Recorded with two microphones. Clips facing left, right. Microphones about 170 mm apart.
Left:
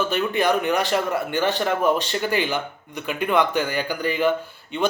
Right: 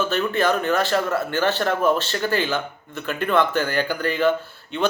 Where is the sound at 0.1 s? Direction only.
15° left (ahead or behind).